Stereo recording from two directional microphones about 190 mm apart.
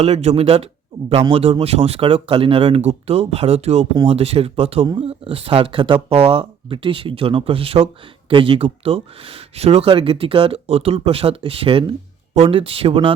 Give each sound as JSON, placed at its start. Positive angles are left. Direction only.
{"t": 0.0, "sound": "speech", "side_deg": -35}